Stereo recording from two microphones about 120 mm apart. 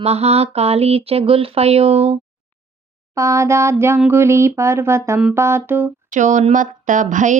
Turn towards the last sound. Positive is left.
turn(degrees=-90)